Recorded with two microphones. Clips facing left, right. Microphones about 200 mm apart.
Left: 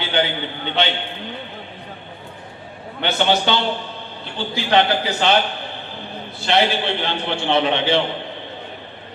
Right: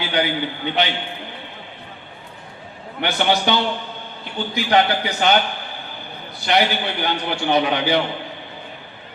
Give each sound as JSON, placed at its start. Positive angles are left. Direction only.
{"t": 0.0, "sound": "a man's voice", "side_deg": 25}
{"t": 3.0, "sound": "a man's voice", "side_deg": 25}
{"t": 6.4, "sound": "a man's voice", "side_deg": 25}